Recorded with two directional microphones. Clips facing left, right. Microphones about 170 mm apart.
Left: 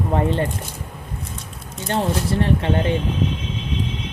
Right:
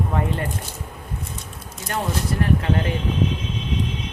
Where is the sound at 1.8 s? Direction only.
30° left (ahead or behind).